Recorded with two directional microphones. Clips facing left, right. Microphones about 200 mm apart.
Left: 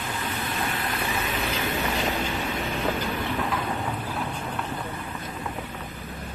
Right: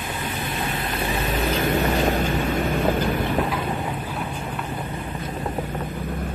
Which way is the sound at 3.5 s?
10° right (ahead or behind).